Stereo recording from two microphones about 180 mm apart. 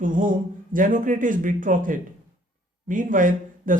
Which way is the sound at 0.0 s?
45° right (ahead or behind).